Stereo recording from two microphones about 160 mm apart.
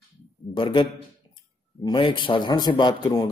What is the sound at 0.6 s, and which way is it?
Speech, 30° left (ahead or behind).